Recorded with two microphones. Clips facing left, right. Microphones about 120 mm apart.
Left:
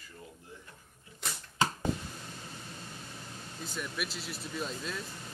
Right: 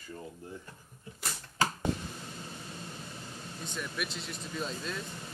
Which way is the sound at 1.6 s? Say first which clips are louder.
Even; 20° left (ahead or behind).